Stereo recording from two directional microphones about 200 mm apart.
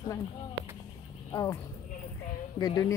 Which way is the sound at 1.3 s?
15° left (ahead or behind).